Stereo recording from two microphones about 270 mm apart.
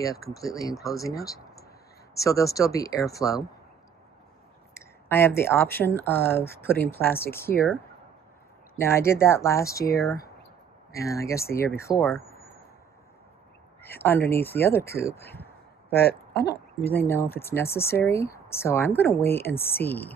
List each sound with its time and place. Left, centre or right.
0.0 s speech: centre
4.7 s speech: centre
13.8 s speech: centre
16.1 s speech: left
17.0 s speech: centre